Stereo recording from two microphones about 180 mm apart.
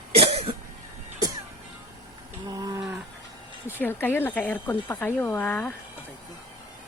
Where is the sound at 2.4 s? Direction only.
20° right (ahead or behind).